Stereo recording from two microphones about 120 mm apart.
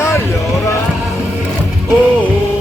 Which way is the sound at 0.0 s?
20° left (ahead or behind).